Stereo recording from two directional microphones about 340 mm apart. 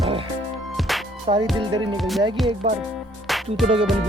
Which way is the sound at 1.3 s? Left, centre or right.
Centre.